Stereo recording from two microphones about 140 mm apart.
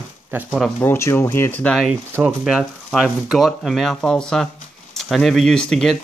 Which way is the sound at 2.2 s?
Centre (ahead or behind).